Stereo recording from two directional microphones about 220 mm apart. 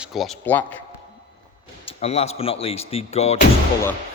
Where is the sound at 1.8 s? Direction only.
30° left (ahead or behind).